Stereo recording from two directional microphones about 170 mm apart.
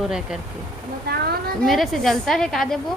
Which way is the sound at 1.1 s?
70° right (ahead or behind).